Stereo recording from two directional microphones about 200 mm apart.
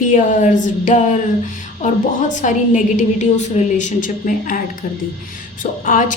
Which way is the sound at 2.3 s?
40° left (ahead or behind).